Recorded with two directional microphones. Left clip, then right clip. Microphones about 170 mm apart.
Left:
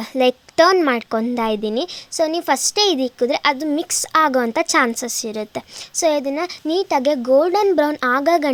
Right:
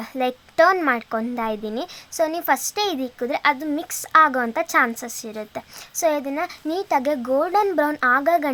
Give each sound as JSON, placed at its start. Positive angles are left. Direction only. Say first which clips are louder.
{"t": 0.1, "sound": "speech", "louder": "left 8 dB", "side_deg": 40}